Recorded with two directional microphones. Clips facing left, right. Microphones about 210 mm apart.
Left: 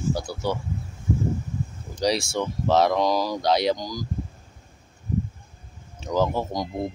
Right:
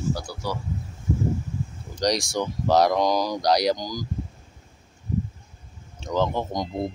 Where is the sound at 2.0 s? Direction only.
5° left (ahead or behind).